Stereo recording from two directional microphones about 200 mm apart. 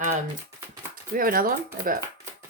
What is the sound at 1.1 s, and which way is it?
Speech, 45° right (ahead or behind).